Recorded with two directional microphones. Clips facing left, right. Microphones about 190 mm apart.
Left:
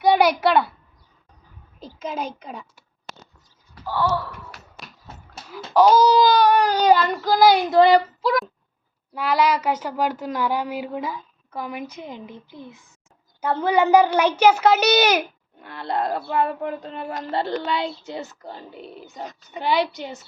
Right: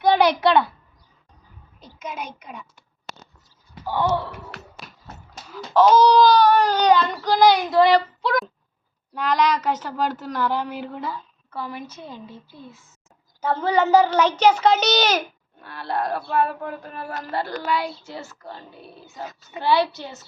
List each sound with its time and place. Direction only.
0.0 s a child's voice: 5° left (ahead or behind)
1.8 s a woman's voice: 30° left (ahead or behind)
3.8 s a sound: 20° right (ahead or behind)
5.5 s speech: 5° left (ahead or behind)
7.7 s speech: 20° left (ahead or behind)
9.1 s speech: 10° left (ahead or behind)
19.2 s a child's voice: 5° right (ahead or behind)
19.5 s speech: 15° left (ahead or behind)